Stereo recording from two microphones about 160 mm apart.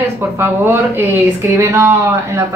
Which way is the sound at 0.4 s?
15° right (ahead or behind).